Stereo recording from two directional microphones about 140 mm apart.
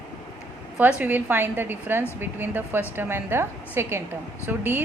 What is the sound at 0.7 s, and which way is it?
Speech, 10° right (ahead or behind).